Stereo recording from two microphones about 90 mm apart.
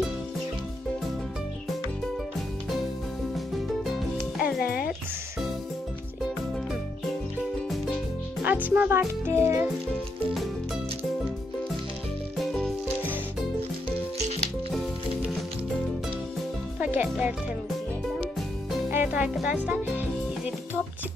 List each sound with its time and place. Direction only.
3.3 s music: centre (ahead or behind)
7.7 s music: centre (ahead or behind)
8.5 s speech: 20° right (ahead or behind)
12.4 s music: 5° left (ahead or behind)
16.8 s music: 15° right (ahead or behind)
18.9 s music: 25° right (ahead or behind)
19.2 s speech: 10° right (ahead or behind)